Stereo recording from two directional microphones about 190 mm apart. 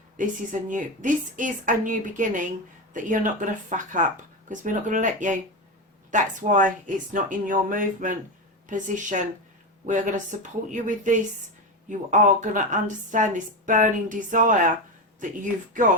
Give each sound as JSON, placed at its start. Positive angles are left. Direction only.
{"t": 0.2, "sound": "a woman's voice", "side_deg": -45}
{"t": 10.4, "sound": "a woman's voice", "side_deg": -40}